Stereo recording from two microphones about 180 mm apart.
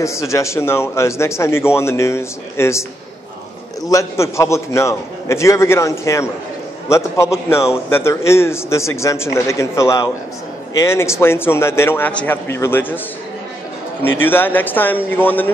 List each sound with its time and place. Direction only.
0.0 s a man's voice: 15° left (ahead or behind)
3.9 s a man's voice: 15° left (ahead or behind)
14.2 s a man's voice: 10° left (ahead or behind)